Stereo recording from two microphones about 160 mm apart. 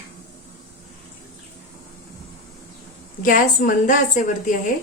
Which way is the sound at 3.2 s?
60° left (ahead or behind).